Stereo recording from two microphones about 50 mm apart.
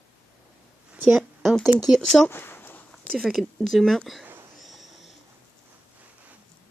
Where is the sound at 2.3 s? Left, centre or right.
Left.